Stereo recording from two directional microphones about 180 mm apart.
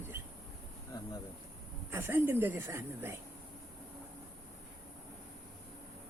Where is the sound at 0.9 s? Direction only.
20° left (ahead or behind).